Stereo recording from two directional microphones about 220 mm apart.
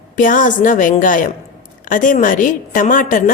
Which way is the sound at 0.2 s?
35° left (ahead or behind).